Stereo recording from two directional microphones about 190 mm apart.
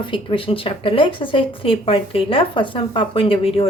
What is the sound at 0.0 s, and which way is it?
Speech, 25° left (ahead or behind).